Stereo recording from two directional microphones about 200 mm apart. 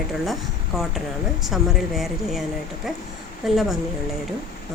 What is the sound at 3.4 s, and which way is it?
Speech, centre (ahead or behind).